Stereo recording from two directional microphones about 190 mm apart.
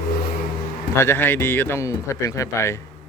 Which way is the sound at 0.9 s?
15° left (ahead or behind).